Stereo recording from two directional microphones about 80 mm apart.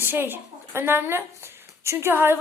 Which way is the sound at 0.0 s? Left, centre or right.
Right.